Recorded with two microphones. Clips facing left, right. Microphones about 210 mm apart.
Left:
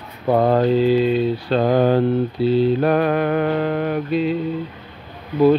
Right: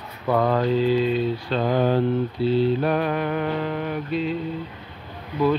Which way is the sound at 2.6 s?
55° left (ahead or behind).